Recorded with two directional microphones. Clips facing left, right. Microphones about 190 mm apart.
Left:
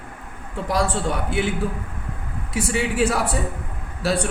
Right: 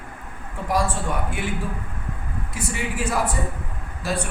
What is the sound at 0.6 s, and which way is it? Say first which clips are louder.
Speech: left 1 dB; 75° left (ahead or behind).